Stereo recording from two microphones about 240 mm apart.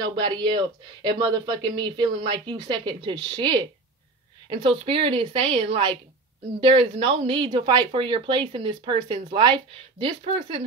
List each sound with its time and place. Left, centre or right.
0.0 s speech: centre